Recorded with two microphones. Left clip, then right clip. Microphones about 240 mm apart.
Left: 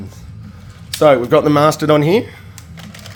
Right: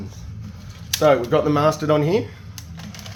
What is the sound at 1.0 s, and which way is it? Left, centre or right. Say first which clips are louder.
Speech: left 6 dB; left.